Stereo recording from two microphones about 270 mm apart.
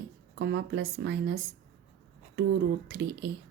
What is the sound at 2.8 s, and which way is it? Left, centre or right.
Speech, right.